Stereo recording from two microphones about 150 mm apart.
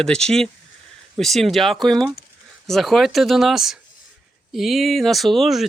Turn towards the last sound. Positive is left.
turn(degrees=0)  # may be behind; listen again after turning